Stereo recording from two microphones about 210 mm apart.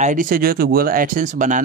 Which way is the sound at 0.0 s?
40° right (ahead or behind).